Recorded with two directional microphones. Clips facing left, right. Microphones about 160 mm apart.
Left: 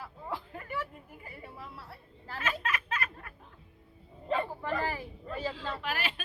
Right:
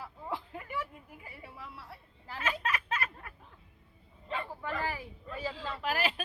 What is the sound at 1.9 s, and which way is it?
Chatter, 15° right (ahead or behind).